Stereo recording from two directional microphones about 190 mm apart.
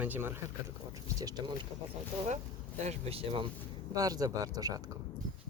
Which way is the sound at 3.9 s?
20° right (ahead or behind).